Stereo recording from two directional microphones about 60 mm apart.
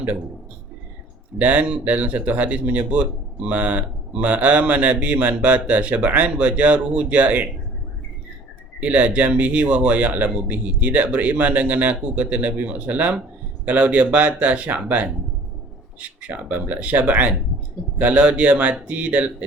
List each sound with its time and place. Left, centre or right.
1.4 s speech: right
8.8 s speech: right